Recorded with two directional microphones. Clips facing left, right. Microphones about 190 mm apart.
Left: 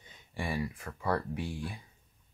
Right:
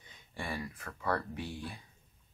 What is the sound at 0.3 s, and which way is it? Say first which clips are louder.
Speech: left 5 dB; 15° left (ahead or behind).